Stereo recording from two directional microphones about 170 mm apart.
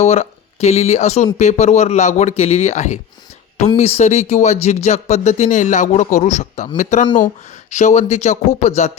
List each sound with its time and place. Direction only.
0.0 s speech: 40° left (ahead or behind)